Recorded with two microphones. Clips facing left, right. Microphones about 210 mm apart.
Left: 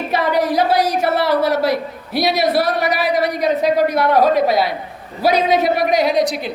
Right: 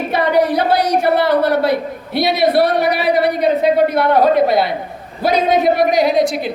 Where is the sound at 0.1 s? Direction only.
60° right (ahead or behind).